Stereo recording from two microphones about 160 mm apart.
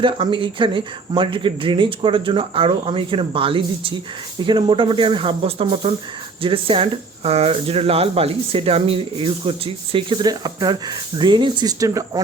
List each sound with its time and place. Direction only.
0.0 s speech: 30° right (ahead or behind)